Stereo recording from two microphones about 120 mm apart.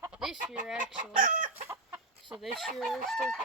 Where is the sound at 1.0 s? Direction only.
90° right.